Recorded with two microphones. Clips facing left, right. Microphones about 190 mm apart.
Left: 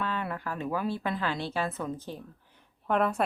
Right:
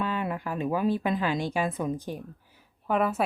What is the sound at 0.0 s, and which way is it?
A woman's voice, 15° right (ahead or behind).